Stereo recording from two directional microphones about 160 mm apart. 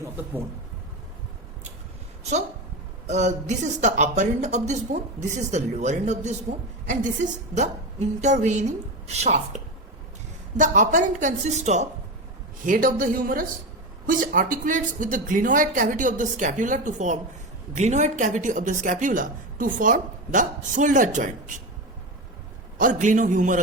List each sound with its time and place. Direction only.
0.0 s speech: 10° right (ahead or behind)
3.1 s a woman's voice: 45° right (ahead or behind)
10.6 s a woman's voice: 50° right (ahead or behind)
12.6 s a woman's voice: 60° right (ahead or behind)
22.8 s a woman's voice: 50° right (ahead or behind)